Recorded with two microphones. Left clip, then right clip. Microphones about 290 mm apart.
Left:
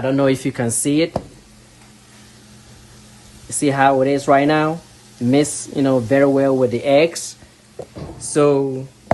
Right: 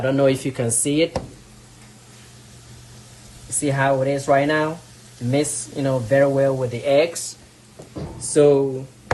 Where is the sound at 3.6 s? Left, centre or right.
Left.